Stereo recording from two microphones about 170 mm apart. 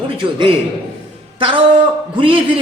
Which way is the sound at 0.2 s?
30° right (ahead or behind).